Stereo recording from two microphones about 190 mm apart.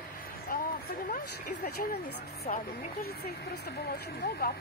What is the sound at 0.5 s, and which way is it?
Speech, 50° left (ahead or behind).